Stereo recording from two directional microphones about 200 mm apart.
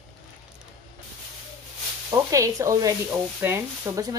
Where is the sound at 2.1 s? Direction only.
15° right (ahead or behind).